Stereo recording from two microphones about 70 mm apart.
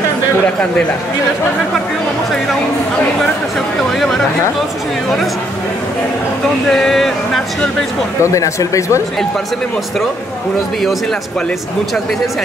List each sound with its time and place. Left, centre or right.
6.7 s speech: centre
8.2 s speech: left